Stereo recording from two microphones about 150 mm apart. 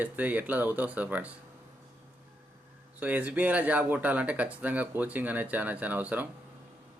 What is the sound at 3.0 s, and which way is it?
Speech, 10° right (ahead or behind).